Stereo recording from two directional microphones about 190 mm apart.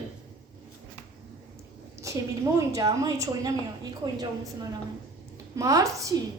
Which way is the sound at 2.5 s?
20° right (ahead or behind).